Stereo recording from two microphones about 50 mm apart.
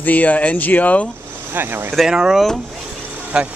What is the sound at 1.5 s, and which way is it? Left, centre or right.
Speech, right.